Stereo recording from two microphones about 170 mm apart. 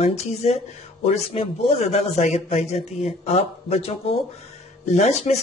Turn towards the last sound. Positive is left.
turn(degrees=40)  # may be behind; listen again after turning